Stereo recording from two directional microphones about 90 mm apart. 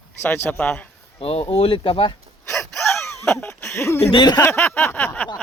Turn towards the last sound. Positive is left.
turn(degrees=20)  # may be behind; listen again after turning